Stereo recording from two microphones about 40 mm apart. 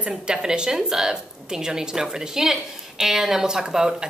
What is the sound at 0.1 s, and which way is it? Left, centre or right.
A woman's voice, centre.